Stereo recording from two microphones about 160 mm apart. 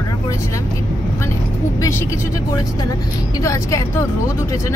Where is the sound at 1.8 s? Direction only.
20° left (ahead or behind).